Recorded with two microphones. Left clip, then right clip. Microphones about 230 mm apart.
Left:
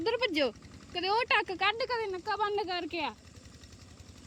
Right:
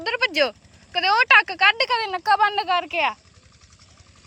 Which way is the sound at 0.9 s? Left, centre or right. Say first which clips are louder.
Right 12 dB; centre.